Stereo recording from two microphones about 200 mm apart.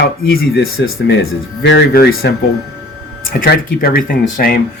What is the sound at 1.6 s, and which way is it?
Speech, 55° left (ahead or behind).